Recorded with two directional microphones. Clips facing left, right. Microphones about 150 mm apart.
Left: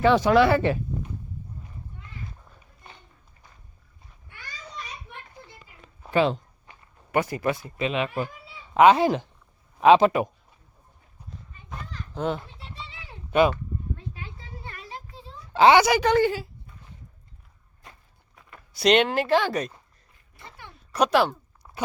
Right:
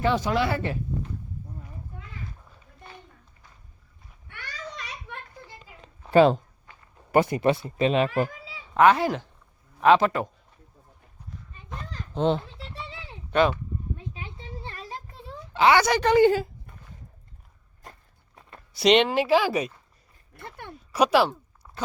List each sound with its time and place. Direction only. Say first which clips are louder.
0.0 s speech: left 6 dB; 75° left (ahead or behind)
4.3 s a sound: right 5 dB; 80° right
6.1 s speech: right 5 dB; 40° right (ahead or behind)
7.1 s speech: right 4 dB; 25° right (ahead or behind)
8.7 s speech: left 2 dB; 20° left (ahead or behind)
12.1 s a child's voice: right 4 dB; 25° right (ahead or behind)
13.5 s a sound: even; 15° right (ahead or behind)
15.5 s a woman's voice: left 3 dB; 30° left (ahead or behind)
15.8 s speech: left 1 dB; 5° left (ahead or behind)
16.3 s a sound: right 7 dB; 50° right (ahead or behind)
18.7 s speech: right 1 dB; centre (ahead or behind)
20.3 s a sound: right 6 dB; 55° right (ahead or behind)
20.9 s speech: right 1 dB; 5° right (ahead or behind)